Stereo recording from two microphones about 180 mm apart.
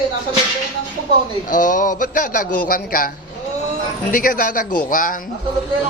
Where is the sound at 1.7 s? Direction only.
45° left (ahead or behind).